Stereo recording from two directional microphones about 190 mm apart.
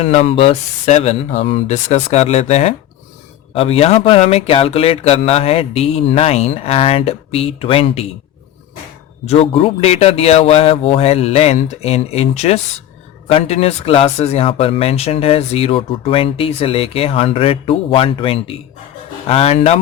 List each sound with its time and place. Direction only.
0.0 s speech: 30° left (ahead or behind)
9.2 s speech: 30° left (ahead or behind)